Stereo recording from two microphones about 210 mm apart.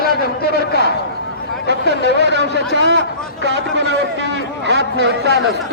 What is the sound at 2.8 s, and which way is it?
Speech, 60° right (ahead or behind).